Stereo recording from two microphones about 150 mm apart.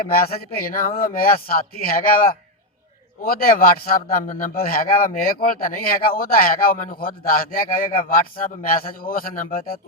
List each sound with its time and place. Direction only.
0.1 s speech: 80° left